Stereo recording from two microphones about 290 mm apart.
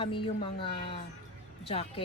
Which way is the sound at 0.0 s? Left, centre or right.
Centre.